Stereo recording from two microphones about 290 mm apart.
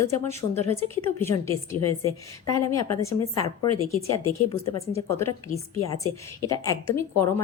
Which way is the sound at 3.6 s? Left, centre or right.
Left.